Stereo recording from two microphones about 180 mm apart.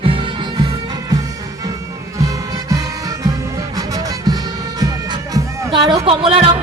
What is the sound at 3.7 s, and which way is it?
Music, 20° right (ahead or behind).